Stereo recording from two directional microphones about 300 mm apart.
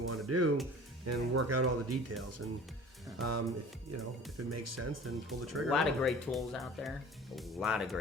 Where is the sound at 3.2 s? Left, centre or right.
Right.